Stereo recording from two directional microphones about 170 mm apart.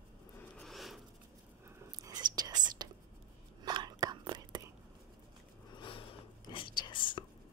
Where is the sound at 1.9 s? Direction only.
25° right (ahead or behind).